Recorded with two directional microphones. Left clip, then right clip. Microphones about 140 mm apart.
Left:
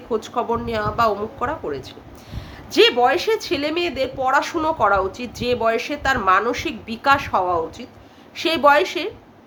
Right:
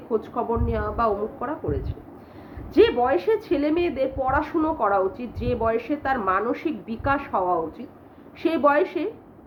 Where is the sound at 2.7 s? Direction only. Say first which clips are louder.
Left 3 dB; 15° left (ahead or behind).